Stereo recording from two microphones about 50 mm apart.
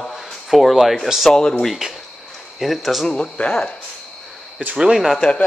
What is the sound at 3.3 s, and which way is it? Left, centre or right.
Speech, left.